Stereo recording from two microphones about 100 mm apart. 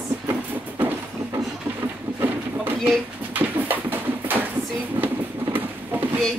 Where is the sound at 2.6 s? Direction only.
20° right (ahead or behind).